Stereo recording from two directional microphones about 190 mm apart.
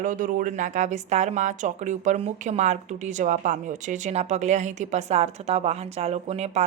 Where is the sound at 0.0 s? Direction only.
45° right (ahead or behind).